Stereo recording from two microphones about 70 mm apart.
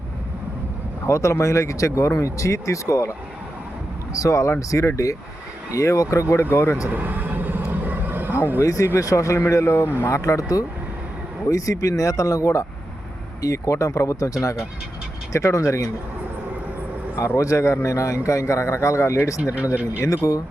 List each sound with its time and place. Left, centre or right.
1.0 s speech: left
4.1 s speech: left
6.9 s vehicle: right
8.6 s speech: left
10.1 s speech: left
17.2 s speech: left
19.7 s speech: centre
20.1 s speech: left